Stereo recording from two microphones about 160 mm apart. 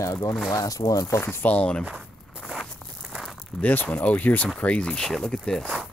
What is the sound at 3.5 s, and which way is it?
Speech, 10° left (ahead or behind).